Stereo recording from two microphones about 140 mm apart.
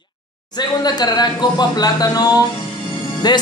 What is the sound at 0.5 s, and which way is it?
A man's voice, 30° left (ahead or behind).